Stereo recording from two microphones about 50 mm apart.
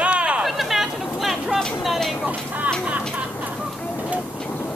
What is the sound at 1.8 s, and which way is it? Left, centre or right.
Vehicle, centre.